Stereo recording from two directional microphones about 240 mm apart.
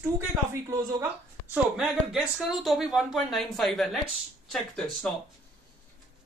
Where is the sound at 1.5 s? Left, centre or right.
Centre.